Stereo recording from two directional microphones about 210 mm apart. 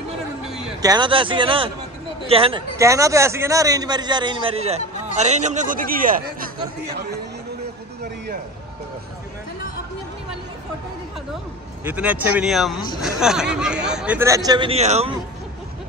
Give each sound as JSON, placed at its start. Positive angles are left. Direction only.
{"t": 0.8, "sound": "a man's voice", "side_deg": -20}
{"t": 2.8, "sound": "a man's voice", "side_deg": -15}
{"t": 11.8, "sound": "speech", "side_deg": -5}